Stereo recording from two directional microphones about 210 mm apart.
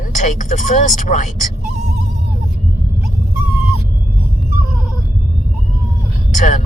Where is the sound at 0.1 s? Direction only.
35° left (ahead or behind).